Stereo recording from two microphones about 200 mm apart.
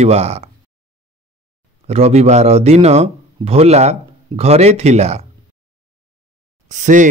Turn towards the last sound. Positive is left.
turn(degrees=-40)  # may be behind; listen again after turning